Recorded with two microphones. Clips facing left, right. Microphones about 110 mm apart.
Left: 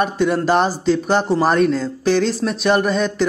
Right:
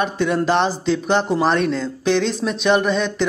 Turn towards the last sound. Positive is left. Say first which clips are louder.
# left 1 dB
turn(degrees=5)  # may be behind; listen again after turning